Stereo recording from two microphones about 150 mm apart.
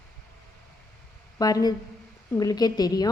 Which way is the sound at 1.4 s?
25° left (ahead or behind).